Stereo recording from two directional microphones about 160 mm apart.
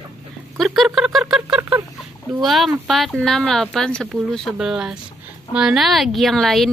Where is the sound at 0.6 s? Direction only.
Centre (ahead or behind).